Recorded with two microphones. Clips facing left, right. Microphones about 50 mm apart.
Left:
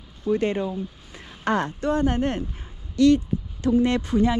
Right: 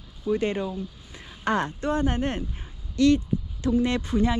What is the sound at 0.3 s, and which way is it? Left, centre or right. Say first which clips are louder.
Speech: left 2 dB; left.